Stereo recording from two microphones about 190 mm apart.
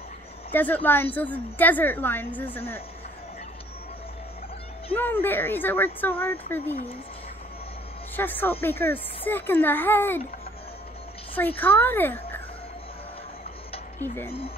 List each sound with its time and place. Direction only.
0.5 s a woman's voice: 10° left (ahead or behind)
4.9 s a woman's voice: 10° left (ahead or behind)
8.2 s a woman's voice: 10° left (ahead or behind)
11.3 s a woman's voice: 10° left (ahead or behind)
13.9 s speech: 10° left (ahead or behind)